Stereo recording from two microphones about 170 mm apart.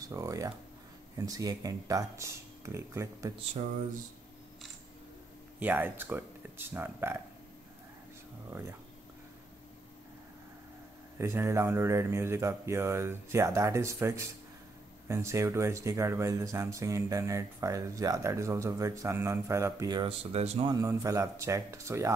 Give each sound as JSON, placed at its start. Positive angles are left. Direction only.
{"t": 0.1, "sound": "speech", "side_deg": -20}
{"t": 5.6, "sound": "speech", "side_deg": -10}
{"t": 11.1, "sound": "speech", "side_deg": -15}
{"t": 20.6, "sound": "speech", "side_deg": -20}